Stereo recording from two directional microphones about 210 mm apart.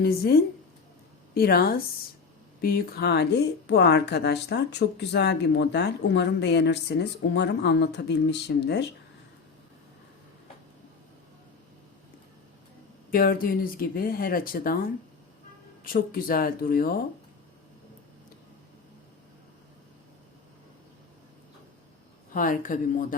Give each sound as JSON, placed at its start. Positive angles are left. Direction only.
{"t": 0.0, "sound": "a woman's voice", "side_deg": 50}
{"t": 13.1, "sound": "a woman's voice", "side_deg": 45}
{"t": 15.8, "sound": "a woman's voice", "side_deg": 40}
{"t": 22.3, "sound": "speech", "side_deg": 40}